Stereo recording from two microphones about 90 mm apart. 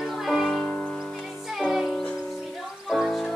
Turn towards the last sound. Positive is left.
turn(degrees=5)  # may be behind; listen again after turning